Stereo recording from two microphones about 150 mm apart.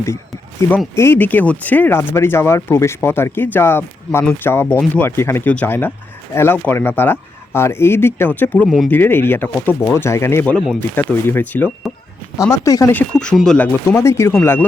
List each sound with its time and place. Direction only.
0.9 s speech: 15° left (ahead or behind)
8.9 s speech: 15° left (ahead or behind)
13.9 s speech: 20° left (ahead or behind)